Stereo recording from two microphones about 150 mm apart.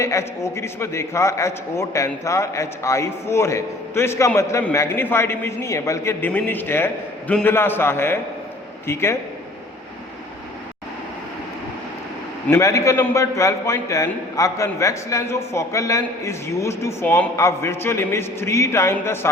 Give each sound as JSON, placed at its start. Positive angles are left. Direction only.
{"t": 0.0, "sound": "a man's voice", "side_deg": 20}
{"t": 12.5, "sound": "a man's voice", "side_deg": 20}